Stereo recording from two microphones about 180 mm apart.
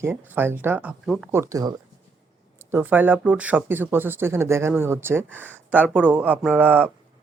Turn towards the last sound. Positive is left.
turn(degrees=-10)  # may be behind; listen again after turning